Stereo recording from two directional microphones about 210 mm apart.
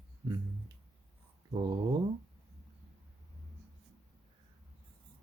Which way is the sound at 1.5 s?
20° right (ahead or behind).